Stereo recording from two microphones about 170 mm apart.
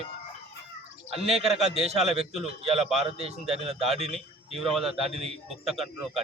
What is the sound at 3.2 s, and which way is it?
Speech, 35° right (ahead or behind).